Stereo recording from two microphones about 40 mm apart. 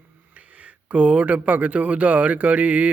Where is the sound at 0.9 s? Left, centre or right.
Right.